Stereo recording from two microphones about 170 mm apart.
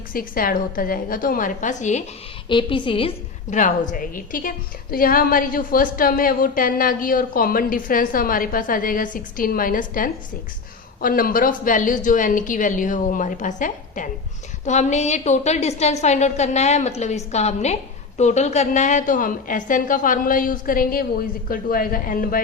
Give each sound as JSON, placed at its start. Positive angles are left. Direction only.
{"t": 0.1, "sound": "a woman's voice", "side_deg": 55}
{"t": 2.5, "sound": "a woman's voice", "side_deg": 30}
{"t": 3.5, "sound": "a woman's voice", "side_deg": 45}